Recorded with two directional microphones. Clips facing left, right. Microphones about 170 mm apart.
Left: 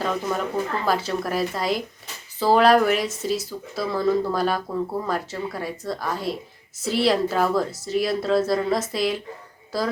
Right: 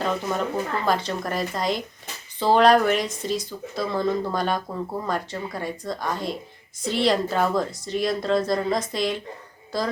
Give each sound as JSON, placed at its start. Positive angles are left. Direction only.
{"t": 0.3, "sound": "speech", "side_deg": 5}